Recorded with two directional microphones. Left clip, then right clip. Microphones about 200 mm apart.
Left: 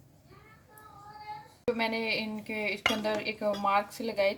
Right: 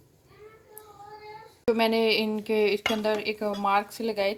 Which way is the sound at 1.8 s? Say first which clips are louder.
Right 9 dB; 35° right (ahead or behind).